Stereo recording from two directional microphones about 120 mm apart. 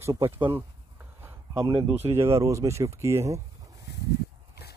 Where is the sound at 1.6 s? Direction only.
35° right (ahead or behind).